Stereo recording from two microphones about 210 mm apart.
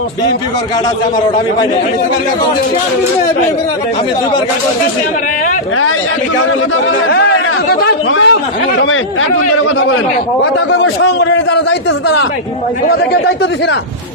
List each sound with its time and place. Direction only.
7.7 s speech: 45° left (ahead or behind)
10.7 s a man's voice: 60° left (ahead or behind)